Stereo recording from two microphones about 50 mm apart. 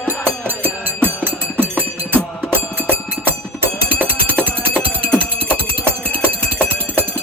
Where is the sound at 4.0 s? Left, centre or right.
Right.